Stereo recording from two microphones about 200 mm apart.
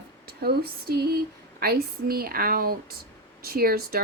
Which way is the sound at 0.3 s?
50° right (ahead or behind).